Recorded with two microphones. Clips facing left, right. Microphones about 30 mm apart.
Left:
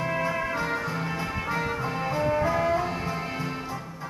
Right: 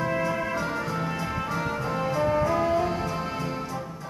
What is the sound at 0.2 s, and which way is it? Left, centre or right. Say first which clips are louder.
Music: even; left.